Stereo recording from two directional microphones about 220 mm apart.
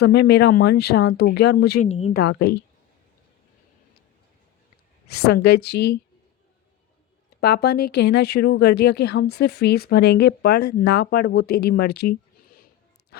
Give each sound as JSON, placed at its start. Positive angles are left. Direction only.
{"t": 0.0, "sound": "speech", "side_deg": 50}
{"t": 1.9, "sound": "speech", "side_deg": 30}
{"t": 2.1, "sound": "speech", "side_deg": 50}
{"t": 5.0, "sound": "speech", "side_deg": 45}
{"t": 7.4, "sound": "speech", "side_deg": 45}